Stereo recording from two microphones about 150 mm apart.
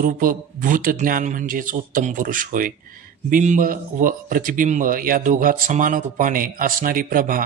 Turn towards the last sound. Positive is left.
turn(degrees=-70)  # may be behind; listen again after turning